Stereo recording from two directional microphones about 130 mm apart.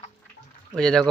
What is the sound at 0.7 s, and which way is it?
Speech, 5° left (ahead or behind).